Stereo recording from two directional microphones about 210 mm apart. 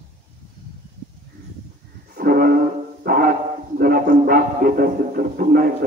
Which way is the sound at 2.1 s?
45° right (ahead or behind).